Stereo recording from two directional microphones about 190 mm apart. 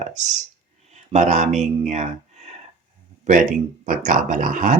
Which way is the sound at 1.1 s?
40° right (ahead or behind).